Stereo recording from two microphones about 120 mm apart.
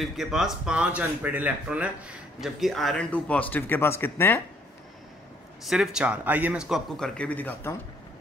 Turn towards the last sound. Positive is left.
turn(degrees=15)  # may be behind; listen again after turning